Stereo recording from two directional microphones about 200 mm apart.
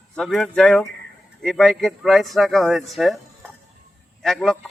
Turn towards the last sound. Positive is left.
turn(degrees=5)  # may be behind; listen again after turning